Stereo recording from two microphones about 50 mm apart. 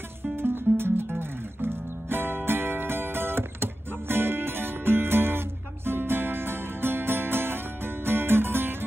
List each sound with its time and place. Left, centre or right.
0.4 s music: right